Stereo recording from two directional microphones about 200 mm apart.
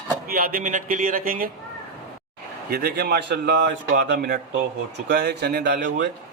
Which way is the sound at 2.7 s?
50° right (ahead or behind).